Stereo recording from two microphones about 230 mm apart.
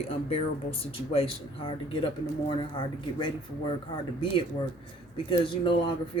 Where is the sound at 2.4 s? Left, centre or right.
Left.